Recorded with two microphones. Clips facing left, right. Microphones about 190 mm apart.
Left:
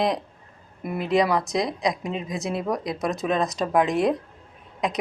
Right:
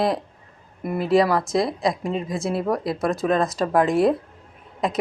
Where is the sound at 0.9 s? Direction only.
30° right (ahead or behind).